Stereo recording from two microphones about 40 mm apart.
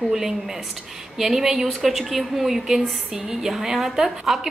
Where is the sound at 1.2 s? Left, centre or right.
Centre.